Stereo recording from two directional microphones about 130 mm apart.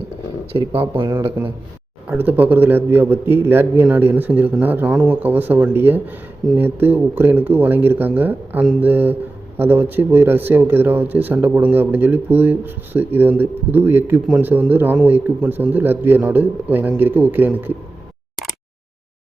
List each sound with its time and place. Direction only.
0.7 s speech: 45° right (ahead or behind)
1.0 s a man's voice: 20° right (ahead or behind)